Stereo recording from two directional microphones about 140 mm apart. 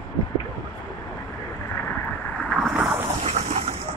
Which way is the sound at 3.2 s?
60° right (ahead or behind).